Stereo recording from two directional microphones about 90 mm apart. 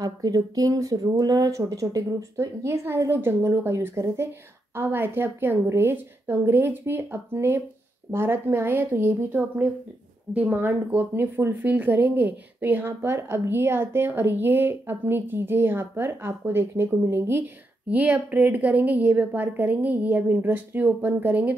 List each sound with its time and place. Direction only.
0.0 s a woman's voice: 45° right (ahead or behind); by 21.5 s 20° right (ahead or behind)